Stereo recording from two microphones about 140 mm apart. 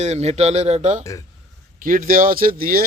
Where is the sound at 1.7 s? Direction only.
75° right (ahead or behind); by 2.8 s 90° right.